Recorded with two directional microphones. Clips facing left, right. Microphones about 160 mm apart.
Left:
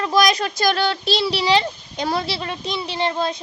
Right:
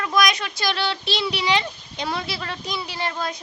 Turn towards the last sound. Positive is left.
turn(degrees=25)  # may be behind; listen again after turning